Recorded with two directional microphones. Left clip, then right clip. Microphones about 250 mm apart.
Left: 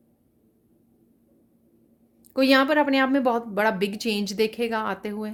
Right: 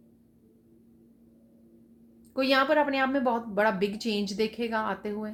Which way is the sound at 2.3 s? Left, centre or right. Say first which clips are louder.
Left 4 dB; left.